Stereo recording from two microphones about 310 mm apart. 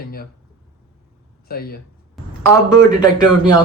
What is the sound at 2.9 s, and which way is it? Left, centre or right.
Speech, centre.